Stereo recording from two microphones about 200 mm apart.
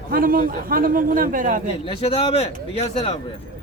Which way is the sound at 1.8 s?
30° left (ahead or behind).